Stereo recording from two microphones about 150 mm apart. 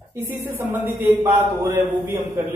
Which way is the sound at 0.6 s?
15° right (ahead or behind).